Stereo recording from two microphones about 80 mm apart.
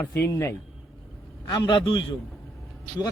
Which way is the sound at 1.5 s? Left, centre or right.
Left.